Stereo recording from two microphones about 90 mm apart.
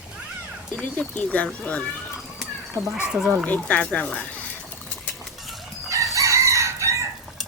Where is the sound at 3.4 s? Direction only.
15° left (ahead or behind).